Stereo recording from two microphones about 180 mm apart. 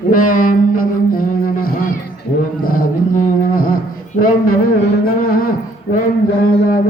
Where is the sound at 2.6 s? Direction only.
50° left (ahead or behind).